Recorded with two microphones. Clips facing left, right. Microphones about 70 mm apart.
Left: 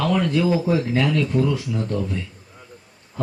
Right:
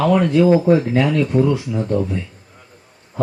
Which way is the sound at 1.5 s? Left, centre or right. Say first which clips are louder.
Right 5 dB; centre.